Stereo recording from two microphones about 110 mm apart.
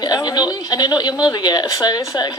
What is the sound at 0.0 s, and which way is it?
Speech, 40° left (ahead or behind).